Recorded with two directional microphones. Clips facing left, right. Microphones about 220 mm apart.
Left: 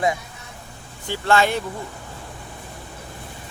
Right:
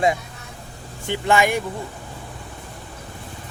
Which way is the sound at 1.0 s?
15° right (ahead or behind).